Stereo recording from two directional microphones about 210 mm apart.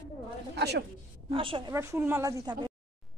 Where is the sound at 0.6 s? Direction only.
50° right (ahead or behind).